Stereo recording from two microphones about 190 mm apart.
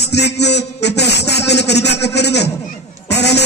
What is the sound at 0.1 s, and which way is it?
A man's voice, 60° left (ahead or behind).